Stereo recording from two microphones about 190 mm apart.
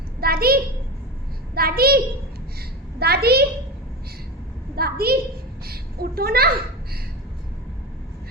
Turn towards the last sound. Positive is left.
turn(degrees=-55)  # may be behind; listen again after turning